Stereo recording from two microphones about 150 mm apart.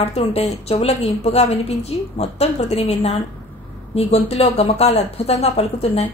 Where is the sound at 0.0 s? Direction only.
45° left (ahead or behind).